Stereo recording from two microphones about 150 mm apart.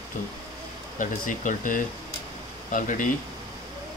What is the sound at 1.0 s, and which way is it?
Speech, 60° left (ahead or behind).